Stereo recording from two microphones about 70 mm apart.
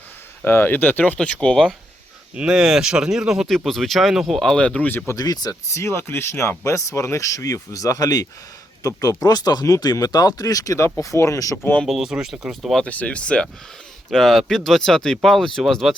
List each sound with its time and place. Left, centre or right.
0.4 s speech: left; by 1.7 s centre
2.3 s speech: centre
4.6 s speech: centre
5.1 s speech: left
5.6 s speech: left
11.5 s speech: left
11.9 s speech: centre
12.8 s speech: centre
14.1 s speech: centre